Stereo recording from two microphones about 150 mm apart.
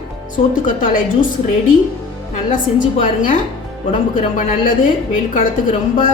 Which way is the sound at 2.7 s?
45° left (ahead or behind).